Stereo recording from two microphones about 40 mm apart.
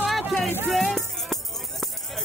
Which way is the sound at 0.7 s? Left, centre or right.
Centre.